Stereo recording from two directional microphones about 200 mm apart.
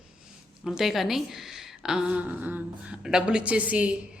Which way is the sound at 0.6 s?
Centre (ahead or behind).